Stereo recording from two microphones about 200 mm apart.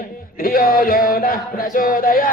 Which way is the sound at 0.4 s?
45° left (ahead or behind).